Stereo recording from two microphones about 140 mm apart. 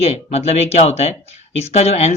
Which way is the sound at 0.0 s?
45° left (ahead or behind).